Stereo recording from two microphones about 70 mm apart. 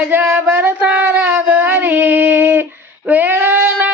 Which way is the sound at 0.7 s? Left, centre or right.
Right.